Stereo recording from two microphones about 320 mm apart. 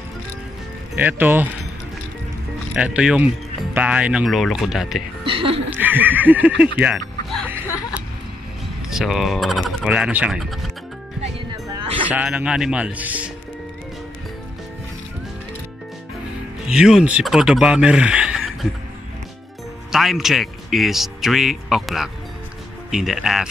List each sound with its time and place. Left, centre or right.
0.9 s a man's voice: centre
2.7 s a man's voice: centre
5.2 s speech: centre
5.8 s a man's voice: centre
6.8 s music: centre
8.9 s a man's voice: centre
11.7 s music: centre
12.1 s a man's voice: centre
16.6 s a man's voice: centre
19.9 s a man's voice: centre